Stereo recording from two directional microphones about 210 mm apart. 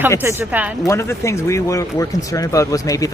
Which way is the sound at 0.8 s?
15° left (ahead or behind).